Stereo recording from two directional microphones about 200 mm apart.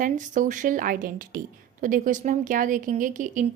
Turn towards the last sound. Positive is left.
turn(degrees=-40)  # may be behind; listen again after turning